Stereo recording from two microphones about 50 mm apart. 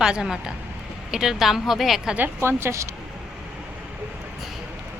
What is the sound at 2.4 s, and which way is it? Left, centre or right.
Speech, right.